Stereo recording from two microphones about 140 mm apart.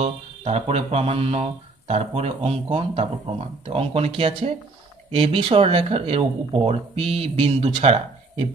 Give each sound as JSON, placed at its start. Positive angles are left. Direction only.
{"t": 0.0, "sound": "music", "side_deg": -45}
{"t": 5.1, "sound": "speech", "side_deg": -40}